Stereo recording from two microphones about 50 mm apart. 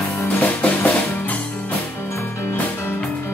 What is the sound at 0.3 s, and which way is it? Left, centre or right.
Music, left.